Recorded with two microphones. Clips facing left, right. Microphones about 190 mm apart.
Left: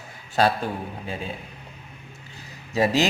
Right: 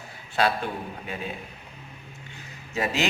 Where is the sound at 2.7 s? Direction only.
35° left (ahead or behind).